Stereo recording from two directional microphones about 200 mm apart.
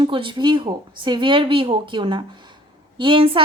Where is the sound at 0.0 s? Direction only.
25° right (ahead or behind).